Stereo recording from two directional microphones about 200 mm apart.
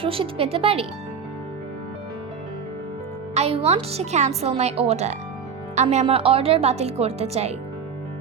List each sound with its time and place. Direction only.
0.0 s speech: 25° right (ahead or behind)
3.3 s a woman's voice: 30° right (ahead or behind)